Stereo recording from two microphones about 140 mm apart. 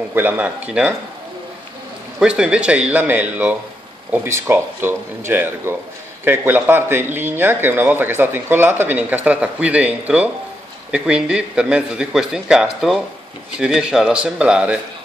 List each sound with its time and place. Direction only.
0.1 s a man's voice: 15° right (ahead or behind)
2.1 s a man's voice: 5° right (ahead or behind)